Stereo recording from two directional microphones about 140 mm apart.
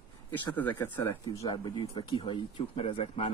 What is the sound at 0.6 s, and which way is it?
Speech, 10° left (ahead or behind).